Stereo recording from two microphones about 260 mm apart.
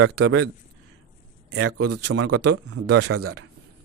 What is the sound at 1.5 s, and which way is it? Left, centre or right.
Speech, right.